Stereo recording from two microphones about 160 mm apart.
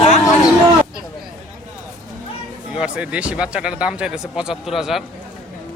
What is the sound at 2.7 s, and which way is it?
Speech, 5° right (ahead or behind).